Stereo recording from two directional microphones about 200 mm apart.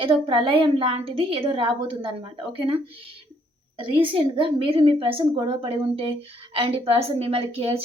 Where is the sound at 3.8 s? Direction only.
25° right (ahead or behind).